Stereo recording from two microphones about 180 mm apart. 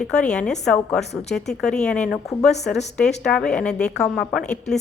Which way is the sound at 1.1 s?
35° left (ahead or behind).